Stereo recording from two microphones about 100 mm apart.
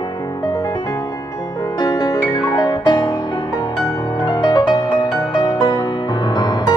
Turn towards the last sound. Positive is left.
turn(degrees=45)  # may be behind; listen again after turning